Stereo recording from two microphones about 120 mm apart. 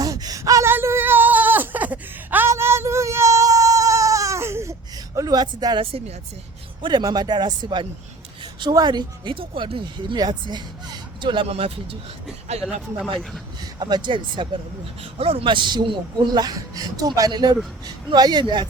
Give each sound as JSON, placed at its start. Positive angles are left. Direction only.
{"t": 0.0, "sound": "a sound", "side_deg": -30}
{"t": 5.1, "sound": "speech", "side_deg": -30}
{"t": 5.8, "sound": "speech", "side_deg": -50}
{"t": 6.8, "sound": "speech", "side_deg": -35}
{"t": 11.4, "sound": "speech", "side_deg": -55}
{"t": 12.5, "sound": "speech", "side_deg": -65}
{"t": 13.7, "sound": "speech", "side_deg": -40}
{"t": 15.2, "sound": "speech", "side_deg": -55}